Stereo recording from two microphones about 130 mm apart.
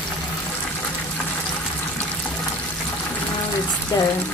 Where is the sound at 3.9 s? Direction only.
25° left (ahead or behind).